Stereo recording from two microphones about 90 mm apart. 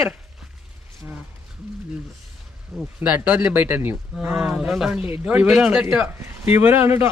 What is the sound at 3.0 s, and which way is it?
Speech, 20° right (ahead or behind).